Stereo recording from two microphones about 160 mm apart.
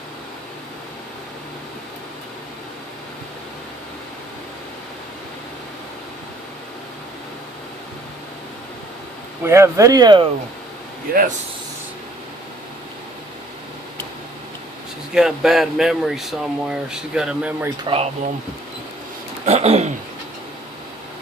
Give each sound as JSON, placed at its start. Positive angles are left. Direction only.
{"t": 9.4, "sound": "speech", "side_deg": -15}
{"t": 11.1, "sound": "speech", "side_deg": -65}
{"t": 15.1, "sound": "speech", "side_deg": -5}
{"t": 17.8, "sound": "speech", "side_deg": -40}
{"t": 19.5, "sound": "speech", "side_deg": -40}